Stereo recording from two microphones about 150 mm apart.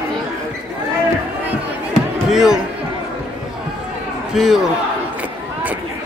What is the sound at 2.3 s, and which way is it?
Speech, 5° right (ahead or behind).